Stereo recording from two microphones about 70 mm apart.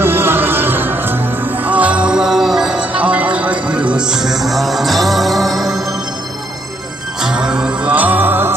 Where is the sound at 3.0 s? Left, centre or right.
Centre.